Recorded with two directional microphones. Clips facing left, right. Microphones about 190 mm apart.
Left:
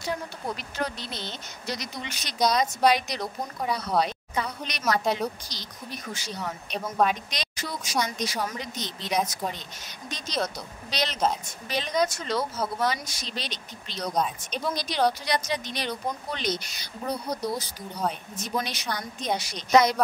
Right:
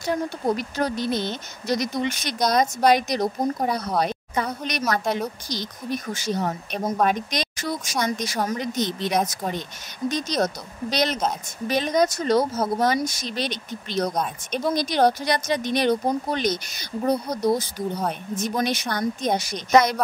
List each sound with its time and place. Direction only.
0.0 s speech: 45° right (ahead or behind)